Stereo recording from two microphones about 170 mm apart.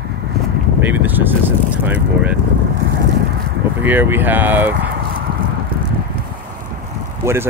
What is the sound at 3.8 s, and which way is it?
Speech, 10° right (ahead or behind).